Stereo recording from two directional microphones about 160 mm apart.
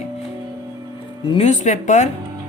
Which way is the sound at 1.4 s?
50° left (ahead or behind).